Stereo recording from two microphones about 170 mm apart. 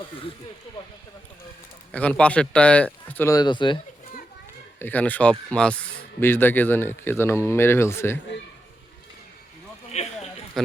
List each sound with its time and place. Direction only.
1.9 s speech: 5° left (ahead or behind); by 3.8 s 30° left (ahead or behind)
4.8 s speech: 10° left (ahead or behind)
9.9 s a sound: 40° left (ahead or behind)